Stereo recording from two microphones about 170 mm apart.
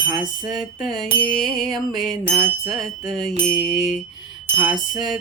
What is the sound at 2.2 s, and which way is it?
Music, 20° right (ahead or behind).